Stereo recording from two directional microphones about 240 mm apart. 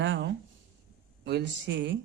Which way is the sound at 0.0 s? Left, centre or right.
Right.